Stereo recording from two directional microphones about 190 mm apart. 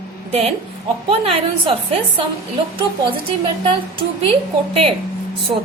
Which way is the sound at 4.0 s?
30° right (ahead or behind).